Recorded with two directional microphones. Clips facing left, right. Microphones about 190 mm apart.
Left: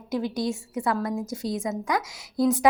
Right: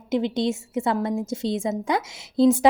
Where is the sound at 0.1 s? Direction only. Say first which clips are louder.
Right 4 dB; 25° right (ahead or behind).